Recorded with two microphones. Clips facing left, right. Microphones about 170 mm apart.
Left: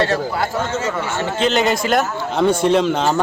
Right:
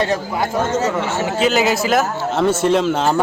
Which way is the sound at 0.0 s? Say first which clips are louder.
Left 1 dB; 15° right (ahead or behind).